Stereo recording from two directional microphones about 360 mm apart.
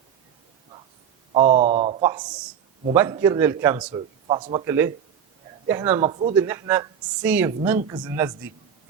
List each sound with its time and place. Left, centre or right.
1.3 s a man's voice: centre
6.0 s a man's voice: centre